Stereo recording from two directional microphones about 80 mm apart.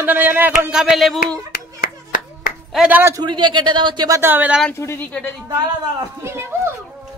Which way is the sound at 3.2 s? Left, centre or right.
Right.